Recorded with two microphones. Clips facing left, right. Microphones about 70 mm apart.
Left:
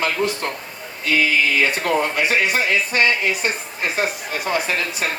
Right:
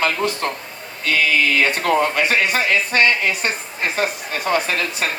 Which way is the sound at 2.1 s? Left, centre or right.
Right.